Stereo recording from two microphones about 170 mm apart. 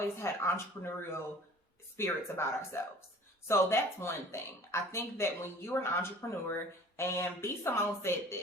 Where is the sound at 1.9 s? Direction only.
15° left (ahead or behind).